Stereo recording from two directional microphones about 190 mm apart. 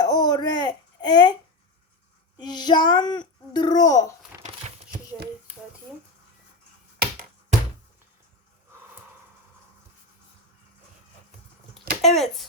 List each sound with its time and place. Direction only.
0.0 s a sound: 20° left (ahead or behind)
2.4 s a child's voice: 20° left (ahead or behind)
12.0 s speech: centre (ahead or behind)